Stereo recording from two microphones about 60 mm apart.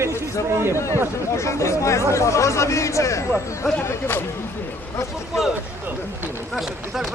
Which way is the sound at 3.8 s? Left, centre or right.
Left.